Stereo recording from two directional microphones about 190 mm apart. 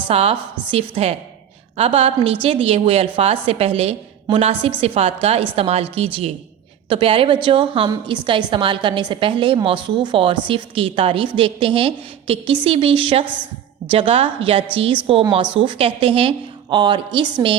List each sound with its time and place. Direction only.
0.1 s a woman's voice: 30° right (ahead or behind)